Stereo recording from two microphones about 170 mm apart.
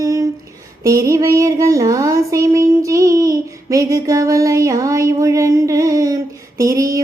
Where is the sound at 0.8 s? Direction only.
20° right (ahead or behind).